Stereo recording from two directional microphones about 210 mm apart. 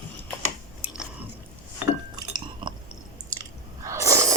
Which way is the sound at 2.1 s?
20° right (ahead or behind).